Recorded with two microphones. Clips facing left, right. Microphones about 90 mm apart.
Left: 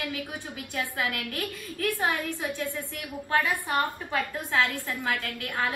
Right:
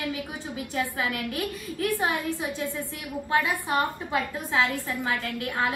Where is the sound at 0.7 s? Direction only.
20° right (ahead or behind).